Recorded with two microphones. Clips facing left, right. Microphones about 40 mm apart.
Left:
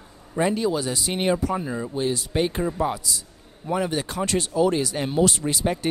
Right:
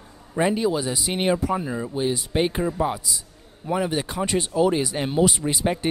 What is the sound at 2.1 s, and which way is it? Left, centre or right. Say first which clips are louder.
Speech: right 1 dB; centre.